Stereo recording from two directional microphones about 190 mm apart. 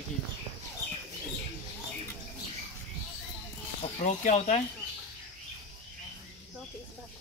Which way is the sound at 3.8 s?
40° left (ahead or behind).